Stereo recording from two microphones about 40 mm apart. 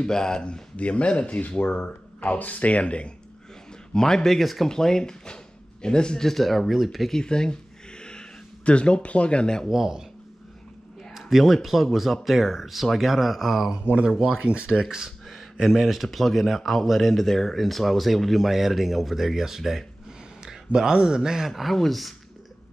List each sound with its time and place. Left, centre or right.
0.0 s speech: centre
3.9 s speech: centre
4.4 s speech: centre
4.6 s speech: centre
6.2 s speech: centre
7.1 s speech: centre
8.0 s a sound: left
9.7 s speech: centre
11.1 s speech: centre
14.4 s speech: right
14.8 s speech: centre
15.0 s speech: centre
21.5 s speech: centre